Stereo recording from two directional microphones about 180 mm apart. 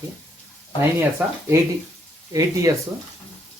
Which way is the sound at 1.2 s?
10° right (ahead or behind).